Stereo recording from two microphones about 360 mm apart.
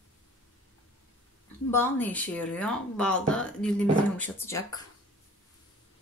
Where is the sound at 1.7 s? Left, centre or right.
Centre.